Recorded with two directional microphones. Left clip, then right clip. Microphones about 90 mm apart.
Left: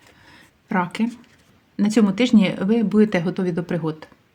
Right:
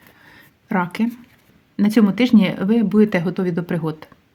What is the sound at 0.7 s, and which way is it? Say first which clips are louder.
A woman's voice: right 1 dB; 25° right (ahead or behind).